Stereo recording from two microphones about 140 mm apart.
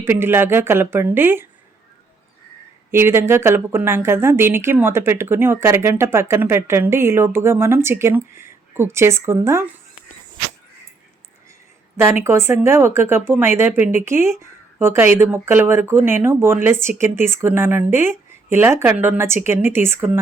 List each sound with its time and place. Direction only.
0.0 s speech: 15° right (ahead or behind)
2.9 s speech: 15° right (ahead or behind)
11.9 s speech: 15° right (ahead or behind)